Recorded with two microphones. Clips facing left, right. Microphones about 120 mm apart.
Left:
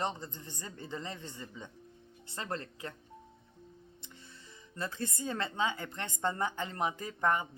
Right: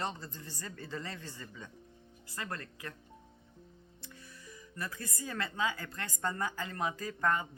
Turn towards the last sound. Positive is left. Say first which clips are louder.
# left 1 dB
turn(degrees=20)  # may be behind; listen again after turning